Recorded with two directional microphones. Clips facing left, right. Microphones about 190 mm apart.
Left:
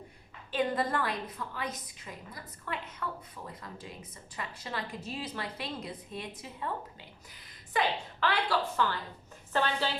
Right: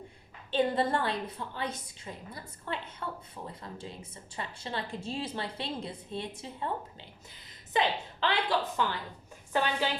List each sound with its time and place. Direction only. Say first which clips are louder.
0.5 s a woman's voice: right 3 dB; 30° right (ahead or behind)
7.7 s a woman's voice: right 1 dB; 25° right (ahead or behind)